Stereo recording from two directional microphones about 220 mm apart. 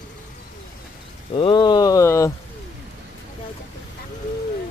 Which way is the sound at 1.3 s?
25° left (ahead or behind).